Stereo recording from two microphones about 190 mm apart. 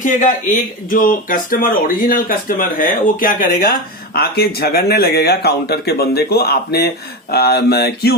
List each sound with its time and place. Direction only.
0.0 s speech: 40° left (ahead or behind)